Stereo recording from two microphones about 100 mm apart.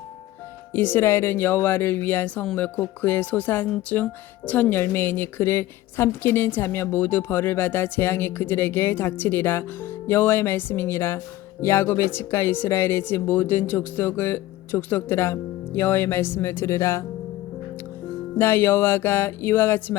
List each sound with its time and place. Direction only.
0.7 s speech: 20° left (ahead or behind)
18.3 s speech: 25° left (ahead or behind)